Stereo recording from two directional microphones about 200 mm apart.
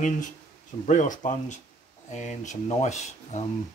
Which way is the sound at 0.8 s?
40° left (ahead or behind).